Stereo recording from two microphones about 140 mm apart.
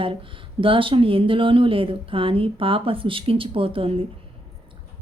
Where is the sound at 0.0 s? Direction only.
40° right (ahead or behind).